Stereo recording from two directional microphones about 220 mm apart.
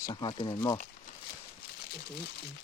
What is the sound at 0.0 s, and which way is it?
Speech, 20° left (ahead or behind).